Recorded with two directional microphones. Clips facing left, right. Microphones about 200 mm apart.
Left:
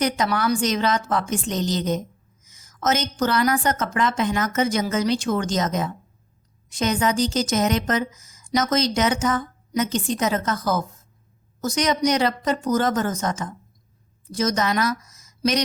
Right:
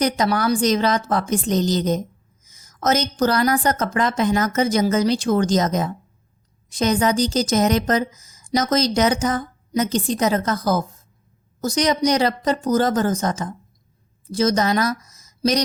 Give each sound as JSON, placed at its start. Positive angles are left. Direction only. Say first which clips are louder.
{"t": 0.0, "sound": "a woman's voice", "louder": "right 3 dB", "side_deg": -35}